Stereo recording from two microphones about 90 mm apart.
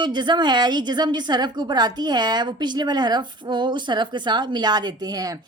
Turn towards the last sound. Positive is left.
turn(degrees=-45)  # may be behind; listen again after turning